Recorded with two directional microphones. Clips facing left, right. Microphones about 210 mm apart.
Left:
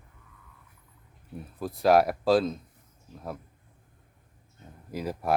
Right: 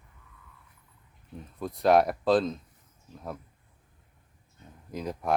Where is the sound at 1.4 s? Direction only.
5° left (ahead or behind).